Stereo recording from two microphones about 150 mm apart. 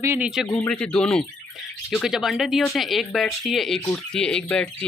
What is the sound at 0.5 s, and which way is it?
Speech, 10° left (ahead or behind).